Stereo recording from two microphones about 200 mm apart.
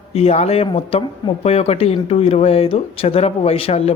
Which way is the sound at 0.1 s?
30° left (ahead or behind).